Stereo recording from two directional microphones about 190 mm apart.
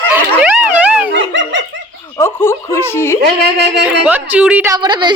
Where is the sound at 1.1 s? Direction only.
70° right (ahead or behind).